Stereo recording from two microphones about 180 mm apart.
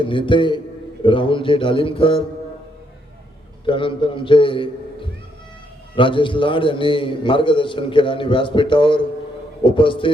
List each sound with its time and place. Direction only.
0.0 s a man's voice: 25° left (ahead or behind)
3.7 s a man's voice: 30° left (ahead or behind)